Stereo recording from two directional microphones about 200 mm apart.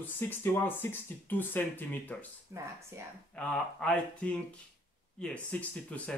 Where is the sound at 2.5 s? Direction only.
15° right (ahead or behind).